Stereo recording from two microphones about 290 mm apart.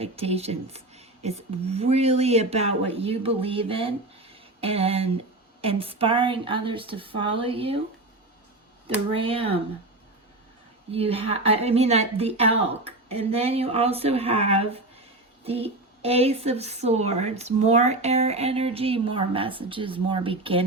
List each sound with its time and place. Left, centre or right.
0.0 s speech: right
9.1 s speech: centre
10.9 s speech: centre